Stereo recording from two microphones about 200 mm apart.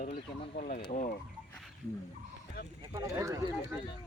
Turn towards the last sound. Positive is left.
turn(degrees=-15)  # may be behind; listen again after turning